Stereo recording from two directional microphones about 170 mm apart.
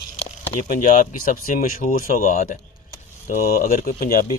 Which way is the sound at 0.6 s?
55° left (ahead or behind).